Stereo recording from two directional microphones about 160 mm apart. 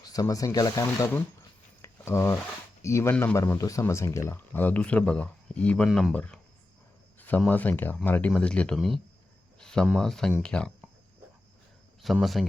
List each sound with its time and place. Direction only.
0.0 s speech: 25° left (ahead or behind)
1.8 s a sound: 15° left (ahead or behind)
2.8 s speech: 15° left (ahead or behind)
12.0 s speech: centre (ahead or behind)